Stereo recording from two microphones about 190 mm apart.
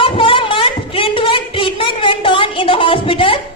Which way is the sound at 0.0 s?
30° left (ahead or behind).